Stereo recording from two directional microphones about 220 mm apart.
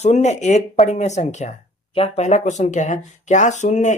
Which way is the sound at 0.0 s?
30° left (ahead or behind).